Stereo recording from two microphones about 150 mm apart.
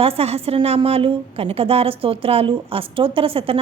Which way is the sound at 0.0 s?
40° right (ahead or behind).